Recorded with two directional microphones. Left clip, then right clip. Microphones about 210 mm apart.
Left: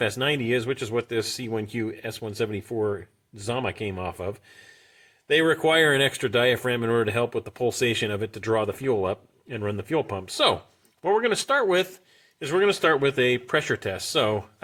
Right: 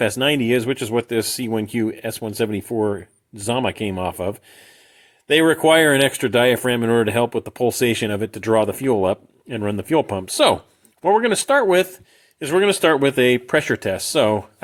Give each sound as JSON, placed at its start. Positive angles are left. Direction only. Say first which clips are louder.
{"t": 0.0, "sound": "speech", "louder": "right 6 dB", "side_deg": -40}